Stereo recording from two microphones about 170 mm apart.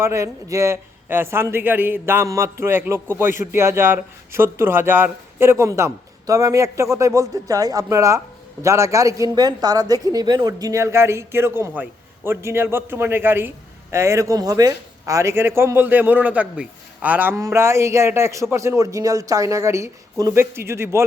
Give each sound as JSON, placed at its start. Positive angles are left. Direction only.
{"t": 0.0, "sound": "a man's voice", "side_deg": -15}